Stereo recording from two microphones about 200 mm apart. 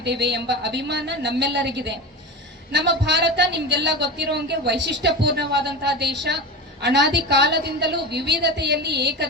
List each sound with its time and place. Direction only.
0.0 s a woman's voice: 55° right (ahead or behind)